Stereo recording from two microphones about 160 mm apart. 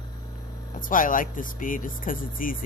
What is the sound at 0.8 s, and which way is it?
Speech, 55° left (ahead or behind).